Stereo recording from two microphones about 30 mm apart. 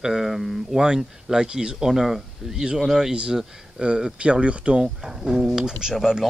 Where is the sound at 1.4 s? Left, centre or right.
Right.